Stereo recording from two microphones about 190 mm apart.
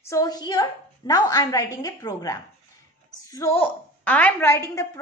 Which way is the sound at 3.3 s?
15° left (ahead or behind).